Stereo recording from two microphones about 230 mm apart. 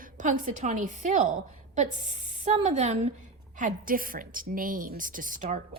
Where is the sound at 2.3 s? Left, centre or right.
Right.